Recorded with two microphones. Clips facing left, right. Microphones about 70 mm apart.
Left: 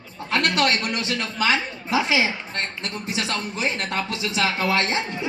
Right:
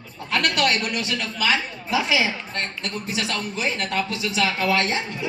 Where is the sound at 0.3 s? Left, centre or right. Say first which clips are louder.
Left 1 dB; left.